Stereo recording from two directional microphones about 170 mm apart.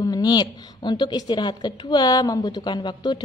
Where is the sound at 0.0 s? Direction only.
20° left (ahead or behind).